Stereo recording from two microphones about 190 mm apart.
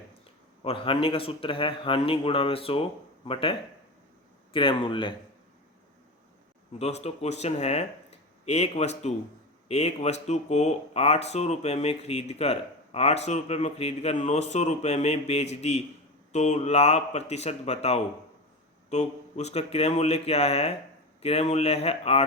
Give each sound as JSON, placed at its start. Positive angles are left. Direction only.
{"t": 0.6, "sound": "a man's voice", "side_deg": 30}
{"t": 4.5, "sound": "a man's voice", "side_deg": 25}
{"t": 6.7, "sound": "speech", "side_deg": 35}